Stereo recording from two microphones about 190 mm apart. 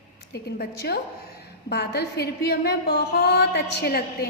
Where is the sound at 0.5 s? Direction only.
55° left (ahead or behind).